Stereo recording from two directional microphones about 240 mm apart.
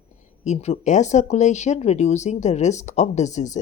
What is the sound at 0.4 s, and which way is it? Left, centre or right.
Speech, left.